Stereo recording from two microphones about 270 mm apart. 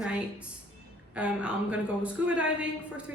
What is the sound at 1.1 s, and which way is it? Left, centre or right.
A woman's voice, centre.